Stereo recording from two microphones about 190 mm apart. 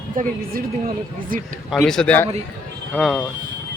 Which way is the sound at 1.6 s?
Centre (ahead or behind).